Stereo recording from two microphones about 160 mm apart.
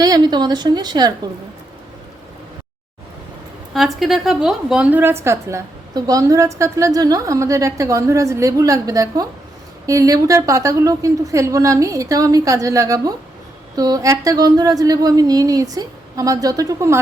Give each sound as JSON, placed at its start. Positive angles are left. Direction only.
{"t": 0.0, "sound": "a woman's voice", "side_deg": -25}
{"t": 3.8, "sound": "a woman's voice", "side_deg": 0}